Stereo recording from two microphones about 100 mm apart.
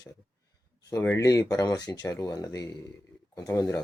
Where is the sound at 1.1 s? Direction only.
35° left (ahead or behind).